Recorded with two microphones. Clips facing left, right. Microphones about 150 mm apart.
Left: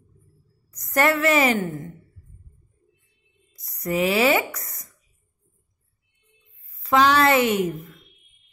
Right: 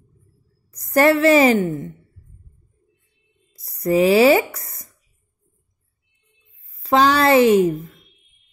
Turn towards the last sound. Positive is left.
turn(degrees=-30)  # may be behind; listen again after turning